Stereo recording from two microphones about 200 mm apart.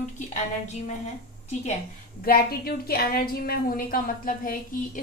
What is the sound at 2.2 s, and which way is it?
A woman's voice, 50° left (ahead or behind).